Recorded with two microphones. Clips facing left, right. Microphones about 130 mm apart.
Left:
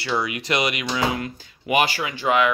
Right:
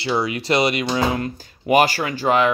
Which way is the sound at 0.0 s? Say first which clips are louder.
Right 3 dB; 25° right (ahead or behind).